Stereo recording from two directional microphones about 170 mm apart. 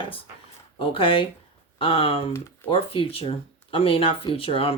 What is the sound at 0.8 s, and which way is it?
Speech, 30° left (ahead or behind).